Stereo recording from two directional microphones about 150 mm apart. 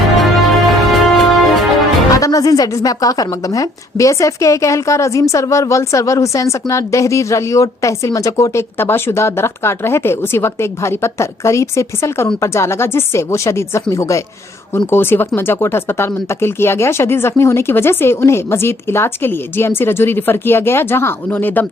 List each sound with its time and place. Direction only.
0.2 s music: centre (ahead or behind)
2.1 s a woman's voice: 25° left (ahead or behind)